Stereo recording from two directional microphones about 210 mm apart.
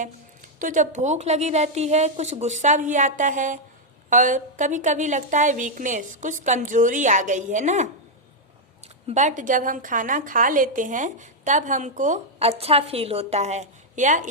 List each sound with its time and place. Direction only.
0.6 s a woman's voice: 35° right (ahead or behind)
9.0 s a woman's voice: 35° right (ahead or behind)